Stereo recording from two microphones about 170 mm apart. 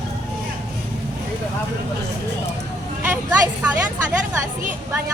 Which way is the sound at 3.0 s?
10° right (ahead or behind).